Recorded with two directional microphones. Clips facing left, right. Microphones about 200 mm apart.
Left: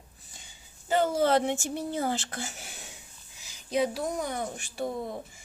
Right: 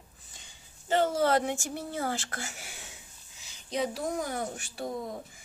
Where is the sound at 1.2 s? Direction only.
25° left (ahead or behind).